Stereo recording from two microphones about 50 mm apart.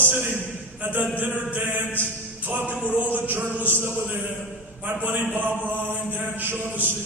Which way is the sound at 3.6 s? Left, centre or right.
Right.